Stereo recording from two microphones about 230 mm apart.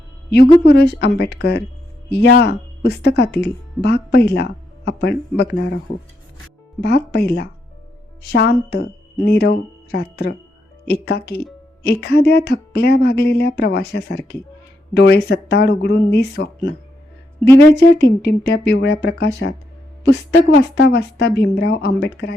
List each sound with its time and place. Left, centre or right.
0.6 s speech: left
6.8 s speech: left